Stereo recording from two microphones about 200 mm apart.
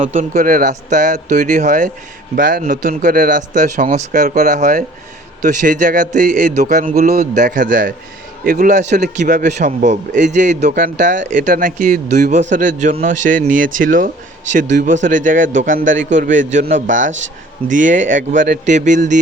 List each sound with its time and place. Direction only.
0.0 s a man's voice: 40° right (ahead or behind)